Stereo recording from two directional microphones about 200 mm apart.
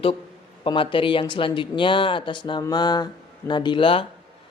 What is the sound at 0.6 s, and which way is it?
Speech, 25° left (ahead or behind).